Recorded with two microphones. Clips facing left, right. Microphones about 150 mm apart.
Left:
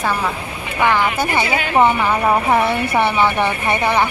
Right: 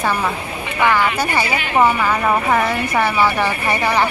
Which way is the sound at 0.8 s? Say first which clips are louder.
Even; 15° left (ahead or behind).